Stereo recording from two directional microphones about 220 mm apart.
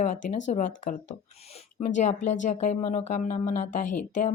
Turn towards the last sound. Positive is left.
turn(degrees=35)  # may be behind; listen again after turning